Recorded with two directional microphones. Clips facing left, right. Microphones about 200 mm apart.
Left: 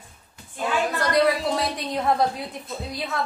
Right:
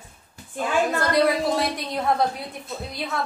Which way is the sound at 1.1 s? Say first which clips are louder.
Even; centre (ahead or behind).